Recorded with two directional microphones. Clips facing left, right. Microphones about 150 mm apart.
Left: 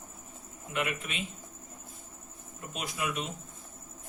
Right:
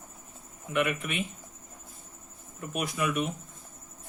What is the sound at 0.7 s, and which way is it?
Speech, 60° right (ahead or behind).